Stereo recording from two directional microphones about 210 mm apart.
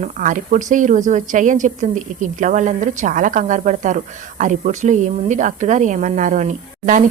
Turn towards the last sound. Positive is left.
turn(degrees=-35)  # may be behind; listen again after turning